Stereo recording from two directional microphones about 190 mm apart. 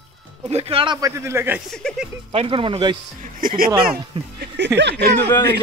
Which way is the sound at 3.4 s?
50° right (ahead or behind).